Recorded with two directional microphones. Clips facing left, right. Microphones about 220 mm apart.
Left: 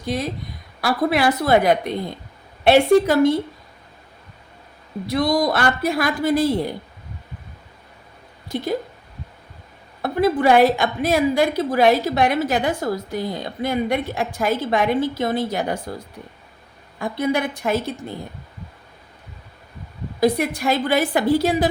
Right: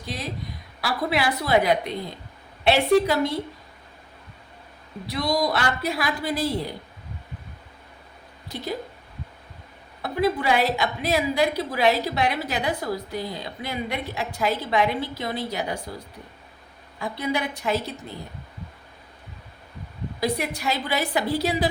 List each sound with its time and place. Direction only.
0.0 s a woman's voice: 50° left (ahead or behind)
5.0 s a woman's voice: 50° left (ahead or behind)
10.0 s a woman's voice: 50° left (ahead or behind)
17.0 s a woman's voice: 50° left (ahead or behind)
20.1 s a woman's voice: 50° left (ahead or behind)